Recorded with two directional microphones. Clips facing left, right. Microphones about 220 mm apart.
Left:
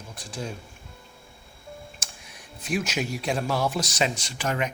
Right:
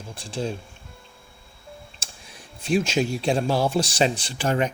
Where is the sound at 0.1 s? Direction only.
30° right (ahead or behind).